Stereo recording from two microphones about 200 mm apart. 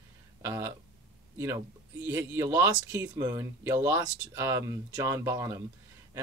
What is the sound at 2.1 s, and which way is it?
Speech, 15° right (ahead or behind).